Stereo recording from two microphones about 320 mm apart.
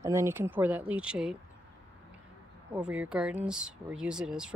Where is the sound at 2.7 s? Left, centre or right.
Centre.